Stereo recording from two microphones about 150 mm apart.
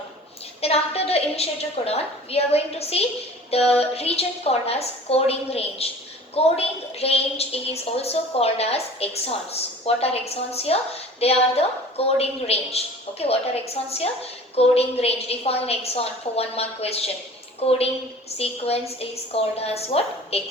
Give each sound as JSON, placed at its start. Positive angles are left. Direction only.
{"t": 0.6, "sound": "a woman's voice", "side_deg": 40}